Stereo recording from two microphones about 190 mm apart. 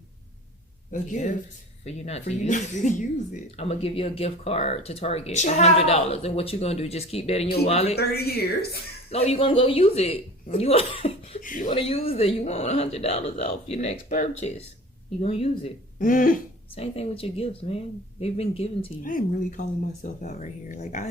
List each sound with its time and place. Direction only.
0.9 s speech: 40° left (ahead or behind)
7.9 s speech: 55° left (ahead or behind)
9.0 s speech: 30° left (ahead or behind)
11.4 s speech: 45° left (ahead or behind)
11.7 s speech: 30° left (ahead or behind)
16.0 s speech: 45° left (ahead or behind)
16.7 s speech: 30° left (ahead or behind)
19.0 s speech: 45° left (ahead or behind)